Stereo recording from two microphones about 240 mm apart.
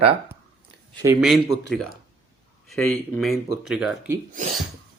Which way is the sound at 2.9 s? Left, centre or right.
Centre.